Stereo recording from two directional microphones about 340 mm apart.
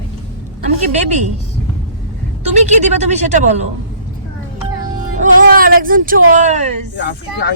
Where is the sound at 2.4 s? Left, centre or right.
Centre.